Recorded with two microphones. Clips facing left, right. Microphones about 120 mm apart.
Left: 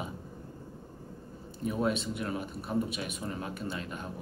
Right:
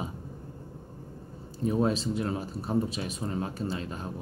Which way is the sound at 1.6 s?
30° right (ahead or behind).